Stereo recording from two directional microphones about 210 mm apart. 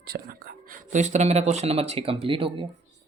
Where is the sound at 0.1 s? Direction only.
45° right (ahead or behind); by 2.6 s 25° right (ahead or behind).